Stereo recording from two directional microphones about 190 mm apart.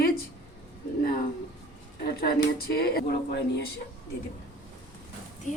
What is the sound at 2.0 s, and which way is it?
Speech, 55° left (ahead or behind).